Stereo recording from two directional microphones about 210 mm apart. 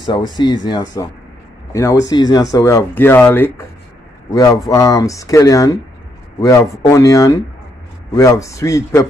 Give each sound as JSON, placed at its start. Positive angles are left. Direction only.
{"t": 0.0, "sound": "speech", "side_deg": 20}
{"t": 6.9, "sound": "speech", "side_deg": 15}